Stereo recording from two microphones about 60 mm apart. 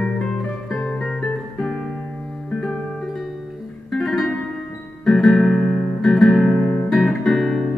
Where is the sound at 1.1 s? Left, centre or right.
Centre.